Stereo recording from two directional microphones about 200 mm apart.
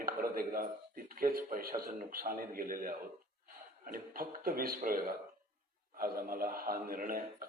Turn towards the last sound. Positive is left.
turn(degrees=-45)  # may be behind; listen again after turning